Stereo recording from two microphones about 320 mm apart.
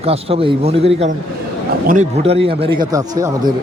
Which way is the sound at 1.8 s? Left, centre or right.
Right.